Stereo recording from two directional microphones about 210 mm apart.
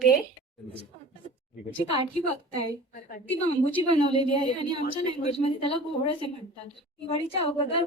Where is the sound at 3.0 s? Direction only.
40° left (ahead or behind).